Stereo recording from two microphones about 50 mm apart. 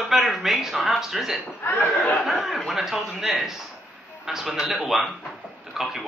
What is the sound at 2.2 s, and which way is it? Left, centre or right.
Speech, centre.